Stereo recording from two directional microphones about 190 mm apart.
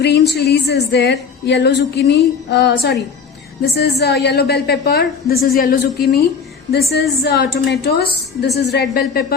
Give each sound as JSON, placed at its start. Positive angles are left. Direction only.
{"t": 0.0, "sound": "a woman's voice", "side_deg": 60}